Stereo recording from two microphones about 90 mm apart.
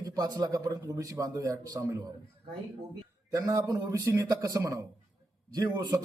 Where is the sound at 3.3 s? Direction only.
40° right (ahead or behind).